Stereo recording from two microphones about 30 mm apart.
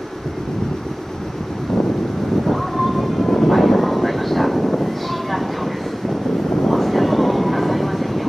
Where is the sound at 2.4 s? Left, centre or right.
Centre.